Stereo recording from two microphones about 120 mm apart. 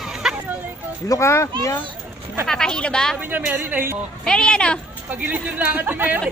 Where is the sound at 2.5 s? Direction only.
5° left (ahead or behind).